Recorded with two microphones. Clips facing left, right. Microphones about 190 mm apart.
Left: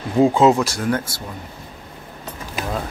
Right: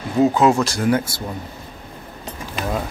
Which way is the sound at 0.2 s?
25° left (ahead or behind).